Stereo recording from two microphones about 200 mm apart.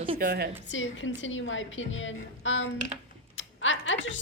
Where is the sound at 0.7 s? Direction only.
70° left (ahead or behind).